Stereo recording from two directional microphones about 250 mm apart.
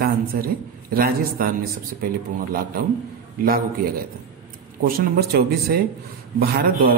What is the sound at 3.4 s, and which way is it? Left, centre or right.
A man's voice, right.